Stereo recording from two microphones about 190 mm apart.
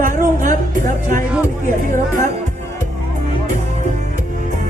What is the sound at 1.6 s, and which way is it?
Speech, 45° right (ahead or behind).